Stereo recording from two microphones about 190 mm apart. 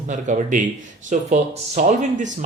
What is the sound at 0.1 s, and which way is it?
Speech, 45° right (ahead or behind).